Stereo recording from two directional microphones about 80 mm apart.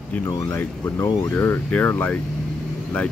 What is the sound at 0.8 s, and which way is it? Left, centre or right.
Speech, left.